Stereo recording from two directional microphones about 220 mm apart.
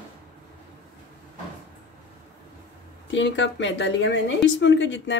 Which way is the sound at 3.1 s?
55° left (ahead or behind).